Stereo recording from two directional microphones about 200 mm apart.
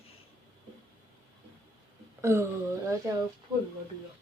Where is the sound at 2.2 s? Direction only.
15° right (ahead or behind).